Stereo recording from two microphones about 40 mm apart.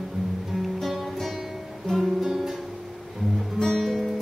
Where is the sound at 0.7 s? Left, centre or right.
Centre.